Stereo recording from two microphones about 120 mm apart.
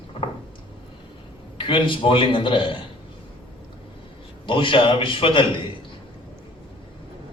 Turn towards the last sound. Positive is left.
turn(degrees=45)  # may be behind; listen again after turning